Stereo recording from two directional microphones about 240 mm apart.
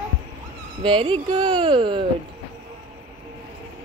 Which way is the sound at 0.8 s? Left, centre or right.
Centre.